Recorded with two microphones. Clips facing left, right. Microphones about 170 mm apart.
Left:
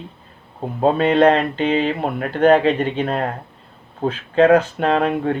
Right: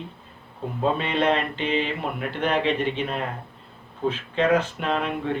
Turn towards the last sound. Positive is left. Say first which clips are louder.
# left 8 dB
turn(degrees=40)  # may be behind; listen again after turning